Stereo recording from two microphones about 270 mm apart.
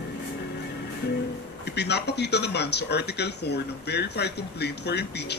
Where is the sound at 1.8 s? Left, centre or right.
Left.